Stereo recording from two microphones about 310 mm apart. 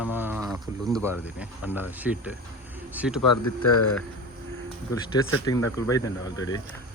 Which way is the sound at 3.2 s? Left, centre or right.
Left.